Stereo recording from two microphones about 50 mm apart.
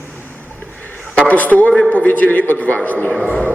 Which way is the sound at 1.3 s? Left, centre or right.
Left.